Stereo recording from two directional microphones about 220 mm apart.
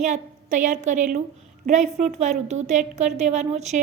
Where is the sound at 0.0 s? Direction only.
35° right (ahead or behind).